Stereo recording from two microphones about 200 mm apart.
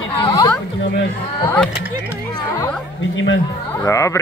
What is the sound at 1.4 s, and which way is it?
Mantra, 5° left (ahead or behind).